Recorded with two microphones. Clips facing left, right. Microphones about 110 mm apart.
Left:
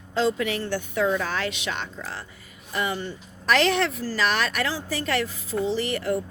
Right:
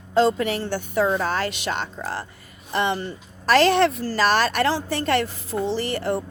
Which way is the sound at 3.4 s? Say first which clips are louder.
Right 5 dB; 35° right (ahead or behind).